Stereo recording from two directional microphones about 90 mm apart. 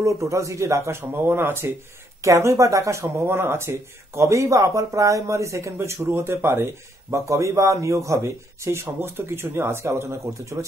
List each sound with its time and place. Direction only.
0.0 s speech: 35° right (ahead or behind)